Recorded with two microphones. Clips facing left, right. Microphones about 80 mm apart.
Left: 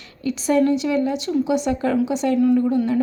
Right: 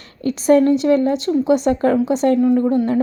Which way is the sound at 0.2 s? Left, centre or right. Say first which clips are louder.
Right 5 dB; right.